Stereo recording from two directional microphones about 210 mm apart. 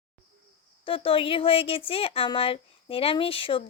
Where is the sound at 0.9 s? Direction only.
25° left (ahead or behind).